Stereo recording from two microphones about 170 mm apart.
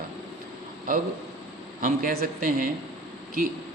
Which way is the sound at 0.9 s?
55° right (ahead or behind).